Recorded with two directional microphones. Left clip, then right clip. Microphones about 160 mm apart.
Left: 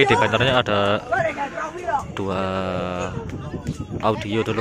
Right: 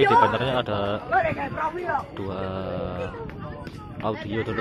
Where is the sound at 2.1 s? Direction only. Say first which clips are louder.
Left 7 dB; 20° left (ahead or behind).